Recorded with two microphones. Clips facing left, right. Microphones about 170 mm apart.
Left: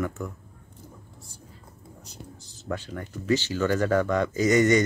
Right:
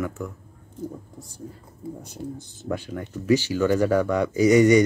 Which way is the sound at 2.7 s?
10° right (ahead or behind).